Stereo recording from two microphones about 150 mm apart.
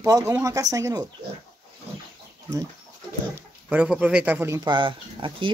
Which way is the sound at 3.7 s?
10° right (ahead or behind).